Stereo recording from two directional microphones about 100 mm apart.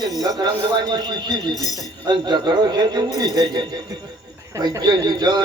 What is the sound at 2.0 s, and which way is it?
A man's voice, 50° right (ahead or behind).